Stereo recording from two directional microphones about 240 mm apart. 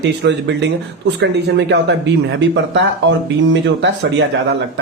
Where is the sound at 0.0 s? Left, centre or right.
Right.